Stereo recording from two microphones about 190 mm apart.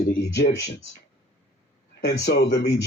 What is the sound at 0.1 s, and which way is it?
Speech, 60° left (ahead or behind).